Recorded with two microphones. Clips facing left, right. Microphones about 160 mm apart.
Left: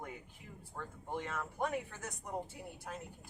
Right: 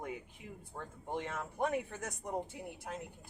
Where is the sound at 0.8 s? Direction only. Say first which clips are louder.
Right 1 dB; 20° right (ahead or behind).